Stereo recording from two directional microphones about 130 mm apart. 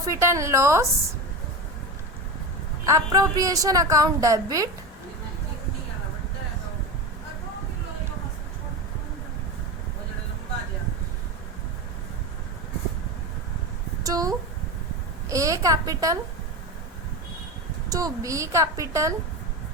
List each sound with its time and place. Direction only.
0.0 s a woman's voice: 20° right (ahead or behind)
2.8 s a woman's voice: 25° right (ahead or behind)
14.0 s a sound: 25° right (ahead or behind)
15.3 s a woman's voice: 25° right (ahead or behind)
17.8 s a woman's voice: 25° right (ahead or behind)